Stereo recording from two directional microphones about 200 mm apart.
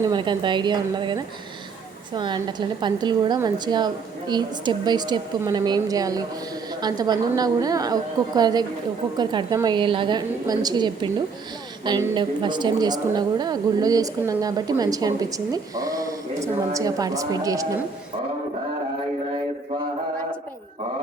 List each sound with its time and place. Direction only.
0.0 s a woman's voice: 20° right (ahead or behind)